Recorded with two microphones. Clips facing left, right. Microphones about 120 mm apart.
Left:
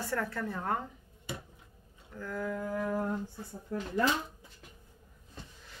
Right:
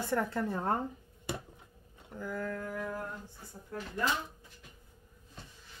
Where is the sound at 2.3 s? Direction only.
10° left (ahead or behind).